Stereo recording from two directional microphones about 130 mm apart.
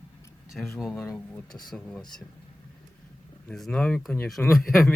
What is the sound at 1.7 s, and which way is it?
Speech, 5° left (ahead or behind).